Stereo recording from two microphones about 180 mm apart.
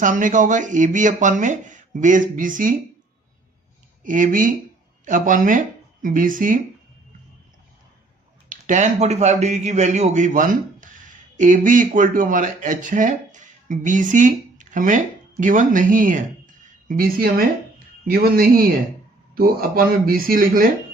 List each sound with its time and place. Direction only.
0.0 s speech: 45° right (ahead or behind)
4.0 s speech: 45° right (ahead or behind)
8.4 s a man's voice: 45° right (ahead or behind)